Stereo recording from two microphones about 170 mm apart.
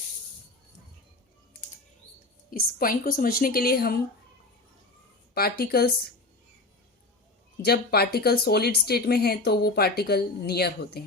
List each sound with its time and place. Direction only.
2.5 s a woman's voice: 55° left (ahead or behind)
5.3 s a woman's voice: 65° left (ahead or behind)
7.6 s speech: 65° left (ahead or behind)